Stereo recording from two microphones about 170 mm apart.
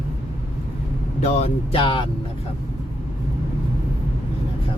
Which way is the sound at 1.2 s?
40° left (ahead or behind).